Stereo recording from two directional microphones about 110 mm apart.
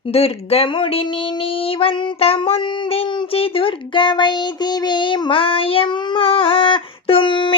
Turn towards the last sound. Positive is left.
turn(degrees=45)  # may be behind; listen again after turning